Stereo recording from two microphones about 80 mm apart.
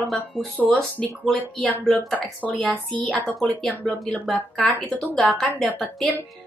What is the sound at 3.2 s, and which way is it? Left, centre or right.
Speech, centre.